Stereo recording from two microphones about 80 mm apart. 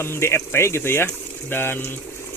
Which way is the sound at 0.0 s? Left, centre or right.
Left.